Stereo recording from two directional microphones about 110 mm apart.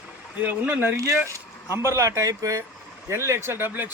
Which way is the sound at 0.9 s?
30° right (ahead or behind).